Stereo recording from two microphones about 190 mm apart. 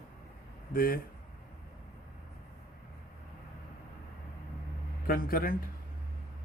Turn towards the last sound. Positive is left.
turn(degrees=50)  # may be behind; listen again after turning